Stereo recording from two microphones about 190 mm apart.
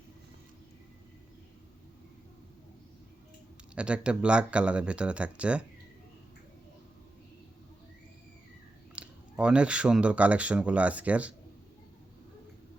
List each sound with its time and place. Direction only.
3.8 s speech: 5° right (ahead or behind)
9.0 s speech: 5° right (ahead or behind)